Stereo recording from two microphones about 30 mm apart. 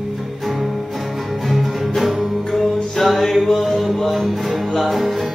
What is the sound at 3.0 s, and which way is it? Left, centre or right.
Music, centre.